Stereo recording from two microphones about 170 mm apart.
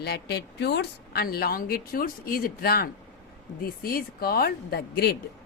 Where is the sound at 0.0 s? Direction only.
75° left (ahead or behind).